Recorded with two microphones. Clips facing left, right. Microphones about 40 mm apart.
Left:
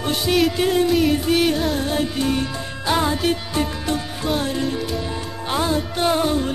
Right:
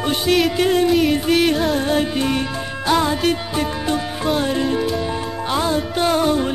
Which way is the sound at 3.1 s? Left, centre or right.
Centre.